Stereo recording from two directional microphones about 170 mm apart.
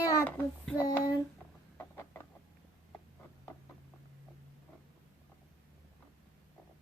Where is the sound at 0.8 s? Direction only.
20° left (ahead or behind).